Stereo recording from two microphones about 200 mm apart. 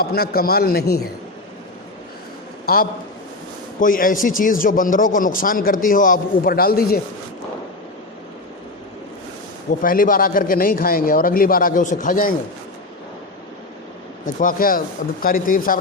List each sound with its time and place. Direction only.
0.0 s a man's voice: 50° left (ahead or behind)
3.8 s a man's voice: 45° left (ahead or behind)
9.8 s a man's voice: 45° left (ahead or behind)
14.3 s a man's voice: 40° left (ahead or behind)